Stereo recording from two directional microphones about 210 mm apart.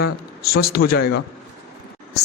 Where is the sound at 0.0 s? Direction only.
45° left (ahead or behind).